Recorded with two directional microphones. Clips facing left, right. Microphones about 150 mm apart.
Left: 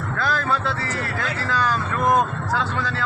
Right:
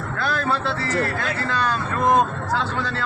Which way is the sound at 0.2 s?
25° right (ahead or behind).